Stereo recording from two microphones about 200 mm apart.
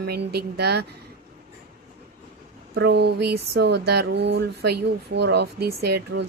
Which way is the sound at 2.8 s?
55° right (ahead or behind).